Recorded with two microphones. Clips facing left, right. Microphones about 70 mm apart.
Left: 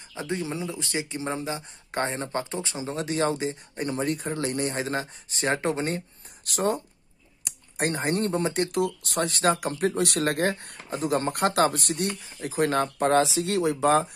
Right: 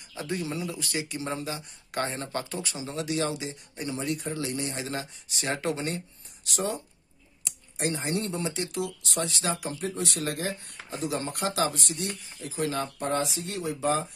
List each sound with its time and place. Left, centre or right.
0.1 s speech: left
13.0 s speech: left